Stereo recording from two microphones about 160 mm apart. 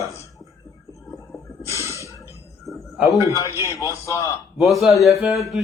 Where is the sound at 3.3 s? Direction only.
20° left (ahead or behind).